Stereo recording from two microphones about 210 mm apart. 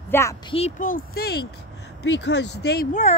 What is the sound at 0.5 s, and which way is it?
Speech, 35° left (ahead or behind).